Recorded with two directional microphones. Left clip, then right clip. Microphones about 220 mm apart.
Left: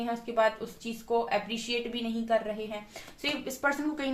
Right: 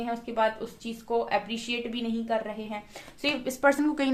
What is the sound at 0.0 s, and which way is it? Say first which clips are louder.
A woman's voice: even; 40° right (ahead or behind).